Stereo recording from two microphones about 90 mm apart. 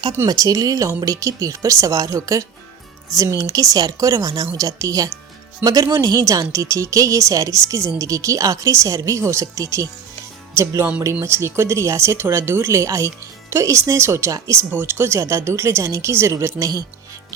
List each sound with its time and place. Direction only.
0.3 s a woman's voice: 45° right (ahead or behind)
14.7 s a woman's voice: 25° right (ahead or behind); by 16.8 s 40° right (ahead or behind)